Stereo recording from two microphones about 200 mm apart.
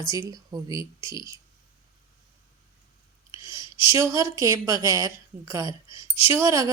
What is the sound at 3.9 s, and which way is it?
Speech, 15° right (ahead or behind).